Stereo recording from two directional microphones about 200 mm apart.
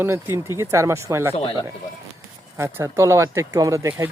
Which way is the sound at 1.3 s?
30° left (ahead or behind).